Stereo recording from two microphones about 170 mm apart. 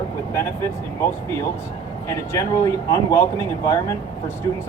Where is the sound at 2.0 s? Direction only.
20° left (ahead or behind).